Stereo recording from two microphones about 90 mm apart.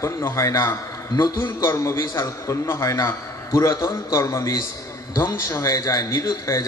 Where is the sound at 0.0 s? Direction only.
35° left (ahead or behind).